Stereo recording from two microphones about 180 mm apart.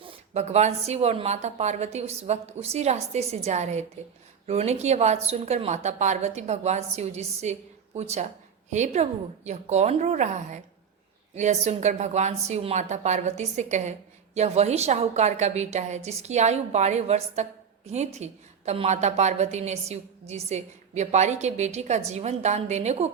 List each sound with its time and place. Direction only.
0.0 s a woman's voice: 40° right (ahead or behind)